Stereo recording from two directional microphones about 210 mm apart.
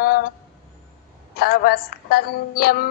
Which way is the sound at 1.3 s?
45° left (ahead or behind).